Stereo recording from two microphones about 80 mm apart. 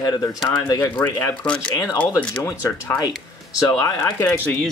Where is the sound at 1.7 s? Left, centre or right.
Left.